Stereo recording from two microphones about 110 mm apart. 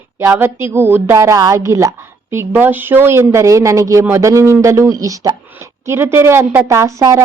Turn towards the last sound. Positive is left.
turn(degrees=-30)  # may be behind; listen again after turning